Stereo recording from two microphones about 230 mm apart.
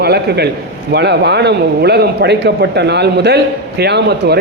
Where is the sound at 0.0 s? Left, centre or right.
Right.